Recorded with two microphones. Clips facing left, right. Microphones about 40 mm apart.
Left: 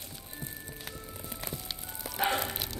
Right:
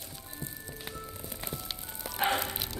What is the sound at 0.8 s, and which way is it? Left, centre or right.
Music, centre.